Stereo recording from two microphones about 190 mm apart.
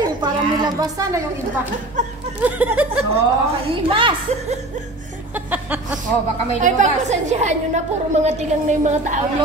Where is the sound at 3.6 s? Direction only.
30° right (ahead or behind).